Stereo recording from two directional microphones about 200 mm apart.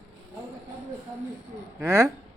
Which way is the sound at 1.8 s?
15° right (ahead or behind).